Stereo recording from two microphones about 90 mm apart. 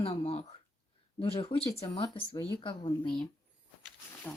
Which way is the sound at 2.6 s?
65° left (ahead or behind).